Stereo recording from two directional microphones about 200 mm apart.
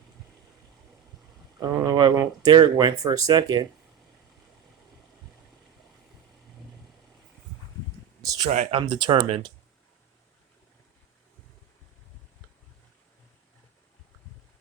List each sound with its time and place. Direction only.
1.5 s speech: 20° right (ahead or behind)
8.2 s a sound: 15° right (ahead or behind)
8.4 s speech: 35° right (ahead or behind)
8.9 s speech: 25° right (ahead or behind)